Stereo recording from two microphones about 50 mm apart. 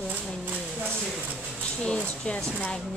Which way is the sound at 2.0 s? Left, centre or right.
Left.